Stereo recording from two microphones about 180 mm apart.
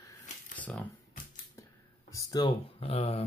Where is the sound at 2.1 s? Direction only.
20° left (ahead or behind).